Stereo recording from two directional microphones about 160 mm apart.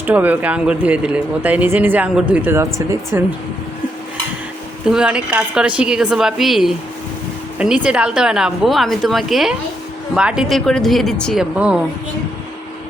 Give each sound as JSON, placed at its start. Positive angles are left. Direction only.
{"t": 0.0, "sound": "speech", "side_deg": -10}
{"t": 4.9, "sound": "a woman's voice", "side_deg": -5}
{"t": 7.9, "sound": "a woman's voice", "side_deg": -5}